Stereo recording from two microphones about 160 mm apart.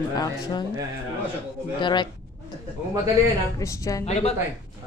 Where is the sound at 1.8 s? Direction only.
30° left (ahead or behind).